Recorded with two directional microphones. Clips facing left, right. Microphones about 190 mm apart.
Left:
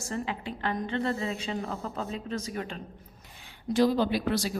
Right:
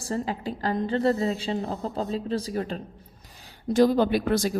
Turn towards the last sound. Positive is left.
turn(degrees=-50)  # may be behind; listen again after turning